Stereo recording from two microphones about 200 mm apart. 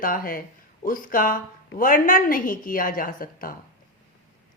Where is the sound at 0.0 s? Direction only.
45° left (ahead or behind).